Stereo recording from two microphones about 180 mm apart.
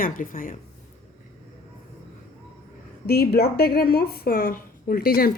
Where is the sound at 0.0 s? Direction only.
50° left (ahead or behind).